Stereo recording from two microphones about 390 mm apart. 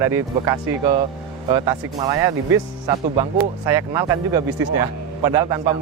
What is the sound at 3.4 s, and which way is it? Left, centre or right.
Speech, centre.